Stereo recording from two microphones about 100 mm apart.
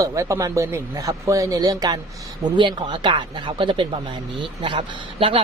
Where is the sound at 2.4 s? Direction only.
50° right (ahead or behind).